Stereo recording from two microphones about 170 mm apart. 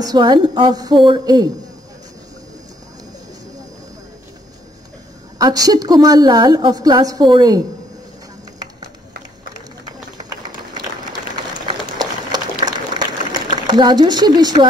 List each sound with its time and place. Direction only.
0.0 s a woman's voice: 25° right (ahead or behind)
5.4 s a woman's voice: 20° right (ahead or behind)
11.6 s a sound: 25° right (ahead or behind)